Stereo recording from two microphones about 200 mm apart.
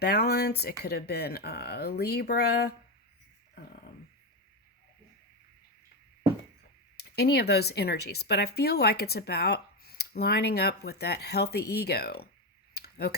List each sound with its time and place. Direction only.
0.0 s speech: 50° left (ahead or behind)
6.9 s speech: 55° left (ahead or behind)
12.7 s a sound: 55° left (ahead or behind)